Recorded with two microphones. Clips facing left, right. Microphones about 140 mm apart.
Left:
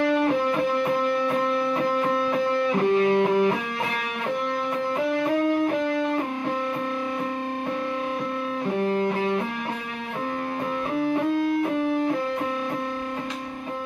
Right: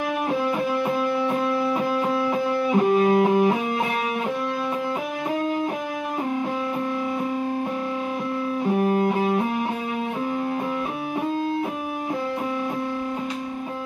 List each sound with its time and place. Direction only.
2.3 s music: 15° right (ahead or behind)
8.8 s music: 15° right (ahead or behind)